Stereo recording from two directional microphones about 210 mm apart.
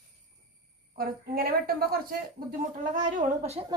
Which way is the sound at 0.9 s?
45° right (ahead or behind).